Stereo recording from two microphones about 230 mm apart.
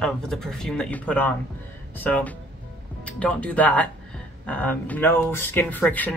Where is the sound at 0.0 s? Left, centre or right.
Centre.